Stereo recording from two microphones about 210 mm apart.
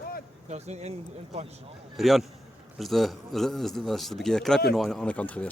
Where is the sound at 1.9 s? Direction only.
Centre (ahead or behind).